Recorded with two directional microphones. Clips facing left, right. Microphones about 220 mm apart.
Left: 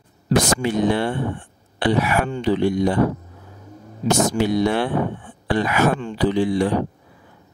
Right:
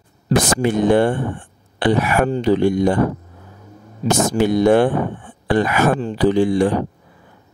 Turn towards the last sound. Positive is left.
turn(degrees=-50)  # may be behind; listen again after turning